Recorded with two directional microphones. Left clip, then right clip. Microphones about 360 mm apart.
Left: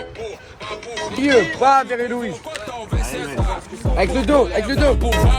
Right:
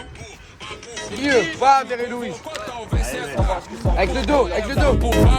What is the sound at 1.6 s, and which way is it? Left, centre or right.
Speech, centre.